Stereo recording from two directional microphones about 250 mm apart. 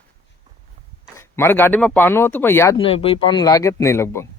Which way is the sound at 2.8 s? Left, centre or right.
Left.